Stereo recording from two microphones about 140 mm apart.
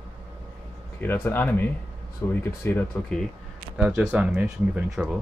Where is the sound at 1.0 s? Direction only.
15° left (ahead or behind).